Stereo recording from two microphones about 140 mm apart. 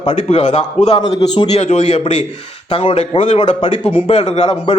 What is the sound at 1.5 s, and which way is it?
Speech, 50° left (ahead or behind).